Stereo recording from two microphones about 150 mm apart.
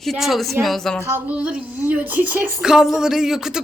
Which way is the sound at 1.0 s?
10° right (ahead or behind).